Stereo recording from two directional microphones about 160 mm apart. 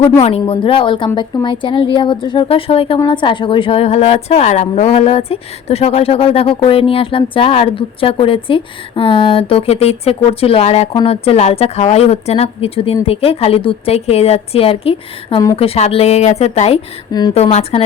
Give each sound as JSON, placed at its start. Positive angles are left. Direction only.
{"t": 0.2, "sound": "a woman's voice", "side_deg": 35}
{"t": 17.1, "sound": "a woman's voice", "side_deg": 25}
{"t": 17.3, "sound": "a woman's voice", "side_deg": 40}